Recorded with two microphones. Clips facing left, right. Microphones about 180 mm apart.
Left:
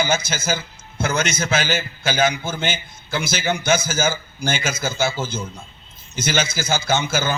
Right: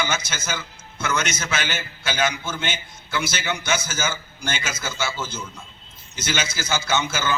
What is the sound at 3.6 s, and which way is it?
A man's voice, 30° left (ahead or behind).